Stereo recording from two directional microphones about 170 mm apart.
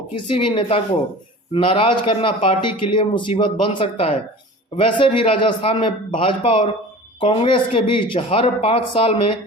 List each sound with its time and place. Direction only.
0.1 s a man's voice: 30° left (ahead or behind)